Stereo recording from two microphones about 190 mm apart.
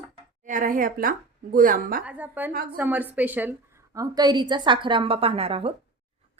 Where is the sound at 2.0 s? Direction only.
10° right (ahead or behind).